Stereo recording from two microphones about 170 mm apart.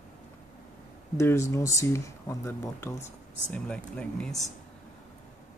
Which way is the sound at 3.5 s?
5° left (ahead or behind).